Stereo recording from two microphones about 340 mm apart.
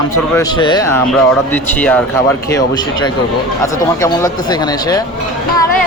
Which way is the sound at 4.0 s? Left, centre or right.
Centre.